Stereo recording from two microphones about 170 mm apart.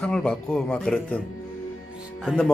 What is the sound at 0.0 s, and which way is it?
Speech, 5° left (ahead or behind).